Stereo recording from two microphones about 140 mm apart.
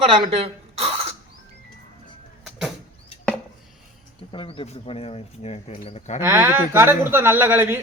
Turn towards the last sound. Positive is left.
turn(degrees=-15)  # may be behind; listen again after turning